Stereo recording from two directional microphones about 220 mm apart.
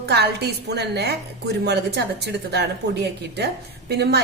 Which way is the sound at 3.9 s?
50° right (ahead or behind).